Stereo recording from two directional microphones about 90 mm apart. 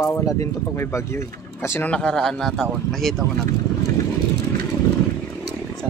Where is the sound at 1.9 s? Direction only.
10° left (ahead or behind).